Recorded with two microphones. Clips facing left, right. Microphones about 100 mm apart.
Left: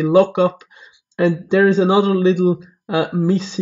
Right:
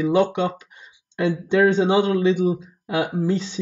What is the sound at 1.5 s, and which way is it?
Speech, 75° left (ahead or behind).